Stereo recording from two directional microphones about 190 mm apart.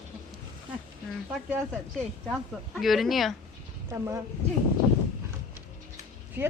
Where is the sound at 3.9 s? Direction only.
15° right (ahead or behind).